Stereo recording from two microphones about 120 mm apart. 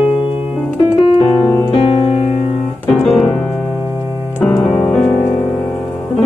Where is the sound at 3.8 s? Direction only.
20° right (ahead or behind).